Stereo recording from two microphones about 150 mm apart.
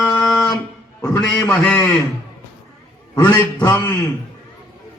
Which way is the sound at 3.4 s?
15° left (ahead or behind).